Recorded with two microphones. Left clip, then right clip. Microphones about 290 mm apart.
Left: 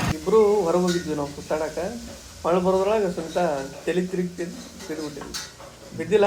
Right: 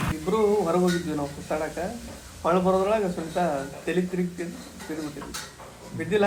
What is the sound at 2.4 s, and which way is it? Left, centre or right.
Speech, centre.